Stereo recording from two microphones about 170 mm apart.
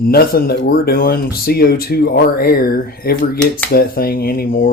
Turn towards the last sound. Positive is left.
turn(degrees=60)  # may be behind; listen again after turning